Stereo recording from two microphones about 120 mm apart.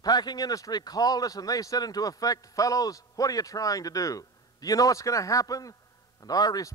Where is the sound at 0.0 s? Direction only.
35° left (ahead or behind).